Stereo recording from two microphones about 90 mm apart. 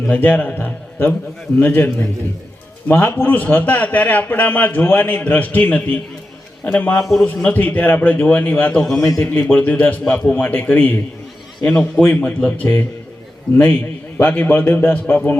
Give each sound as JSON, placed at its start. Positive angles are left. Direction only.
{"t": 0.1, "sound": "a man's voice", "side_deg": 20}
{"t": 7.0, "sound": "speech", "side_deg": 0}
{"t": 7.4, "sound": "a man's voice", "side_deg": 20}
{"t": 9.0, "sound": "a man's voice", "side_deg": 40}
{"t": 9.2, "sound": "a man's voice", "side_deg": 25}
{"t": 11.6, "sound": "a man's voice", "side_deg": 10}
{"t": 12.0, "sound": "a man's voice", "side_deg": 20}
{"t": 14.2, "sound": "a man's voice", "side_deg": 20}